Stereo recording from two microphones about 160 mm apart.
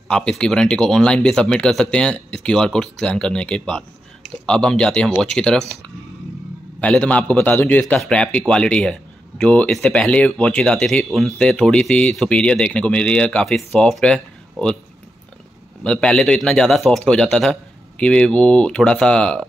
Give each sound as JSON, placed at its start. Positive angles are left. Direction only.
{"t": 0.1, "sound": "speech", "side_deg": 5}
{"t": 6.8, "sound": "a man's voice", "side_deg": 10}
{"t": 15.8, "sound": "speech", "side_deg": 5}